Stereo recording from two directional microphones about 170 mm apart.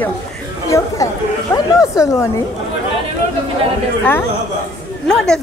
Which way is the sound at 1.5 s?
20° left (ahead or behind).